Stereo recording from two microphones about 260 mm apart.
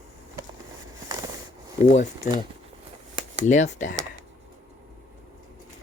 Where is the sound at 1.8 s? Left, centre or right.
Left.